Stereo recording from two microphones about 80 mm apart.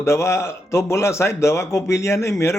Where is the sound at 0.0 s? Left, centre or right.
Left.